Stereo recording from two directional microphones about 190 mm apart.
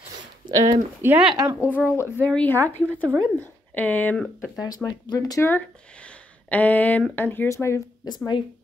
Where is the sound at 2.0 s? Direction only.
10° left (ahead or behind).